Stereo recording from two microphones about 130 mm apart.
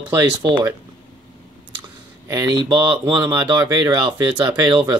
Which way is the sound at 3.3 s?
20° right (ahead or behind).